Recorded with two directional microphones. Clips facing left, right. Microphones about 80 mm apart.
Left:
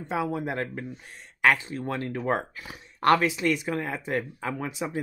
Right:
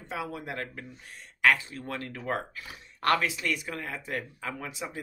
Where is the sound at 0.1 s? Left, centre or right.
Left.